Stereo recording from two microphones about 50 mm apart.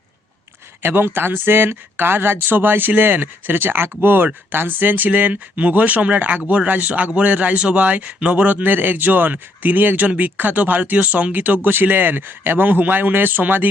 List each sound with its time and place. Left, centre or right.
0.8 s speech: right